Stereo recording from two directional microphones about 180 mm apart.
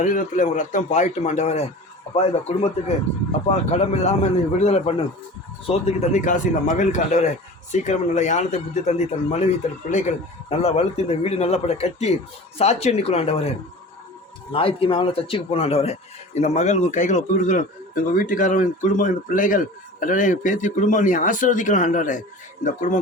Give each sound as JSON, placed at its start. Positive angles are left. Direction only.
{"t": 0.0, "sound": "a man's voice", "side_deg": 45}
{"t": 14.5, "sound": "speech", "side_deg": 30}